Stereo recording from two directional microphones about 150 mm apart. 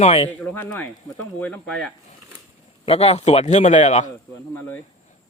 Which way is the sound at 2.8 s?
40° left (ahead or behind).